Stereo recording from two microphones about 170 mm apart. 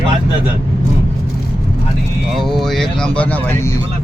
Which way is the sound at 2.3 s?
Centre (ahead or behind).